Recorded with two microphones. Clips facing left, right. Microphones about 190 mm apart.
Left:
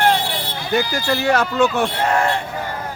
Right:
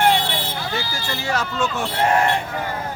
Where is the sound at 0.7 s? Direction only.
65° left (ahead or behind).